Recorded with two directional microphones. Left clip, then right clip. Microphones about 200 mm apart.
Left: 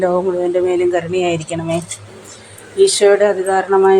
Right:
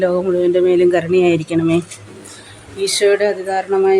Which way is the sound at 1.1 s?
Centre (ahead or behind).